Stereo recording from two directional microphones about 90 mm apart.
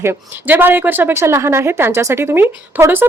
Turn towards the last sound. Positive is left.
turn(degrees=-25)  # may be behind; listen again after turning